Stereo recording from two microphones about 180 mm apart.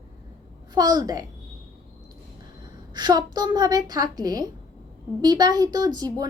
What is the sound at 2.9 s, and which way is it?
Speech, 20° right (ahead or behind).